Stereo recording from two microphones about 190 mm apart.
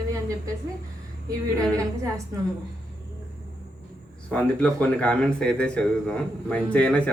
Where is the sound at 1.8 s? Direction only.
15° right (ahead or behind).